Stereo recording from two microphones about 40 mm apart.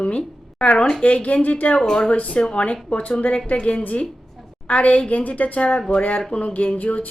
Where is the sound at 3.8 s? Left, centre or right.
Left.